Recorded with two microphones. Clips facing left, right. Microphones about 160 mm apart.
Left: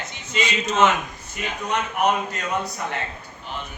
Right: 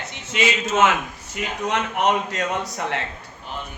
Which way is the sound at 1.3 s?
90° right.